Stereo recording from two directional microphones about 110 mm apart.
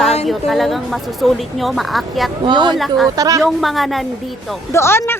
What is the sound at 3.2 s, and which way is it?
Speech, 30° right (ahead or behind).